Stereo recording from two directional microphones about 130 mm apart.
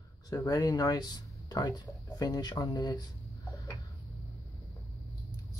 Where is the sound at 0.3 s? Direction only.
30° left (ahead or behind).